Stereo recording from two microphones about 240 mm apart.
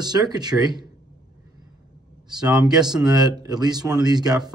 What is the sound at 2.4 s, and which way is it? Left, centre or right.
Speech, centre.